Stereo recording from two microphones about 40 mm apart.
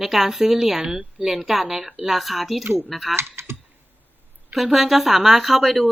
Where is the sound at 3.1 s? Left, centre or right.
Right.